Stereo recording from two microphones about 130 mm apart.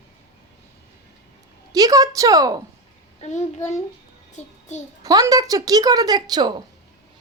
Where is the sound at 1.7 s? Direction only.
30° right (ahead or behind).